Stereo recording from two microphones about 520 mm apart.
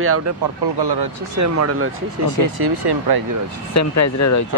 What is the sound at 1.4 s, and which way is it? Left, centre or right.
Speech, right.